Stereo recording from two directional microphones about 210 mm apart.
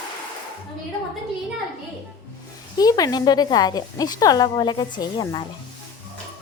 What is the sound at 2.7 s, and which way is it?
Speech, 20° left (ahead or behind).